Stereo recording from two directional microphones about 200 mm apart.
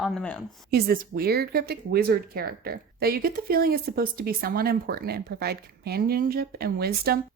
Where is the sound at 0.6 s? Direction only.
50° right (ahead or behind).